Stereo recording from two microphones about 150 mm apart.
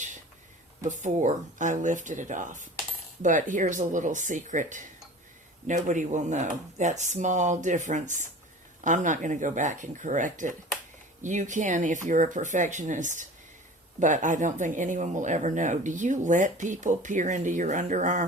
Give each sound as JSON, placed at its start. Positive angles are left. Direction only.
{"t": 0.9, "sound": "speech", "side_deg": -55}